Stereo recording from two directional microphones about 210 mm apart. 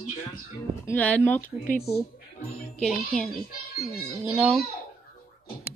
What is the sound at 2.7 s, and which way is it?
Speech, centre (ahead or behind).